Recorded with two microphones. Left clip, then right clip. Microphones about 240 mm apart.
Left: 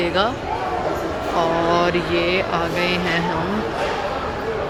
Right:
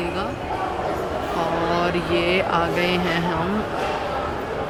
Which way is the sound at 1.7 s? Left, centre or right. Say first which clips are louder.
Left 3 dB; centre.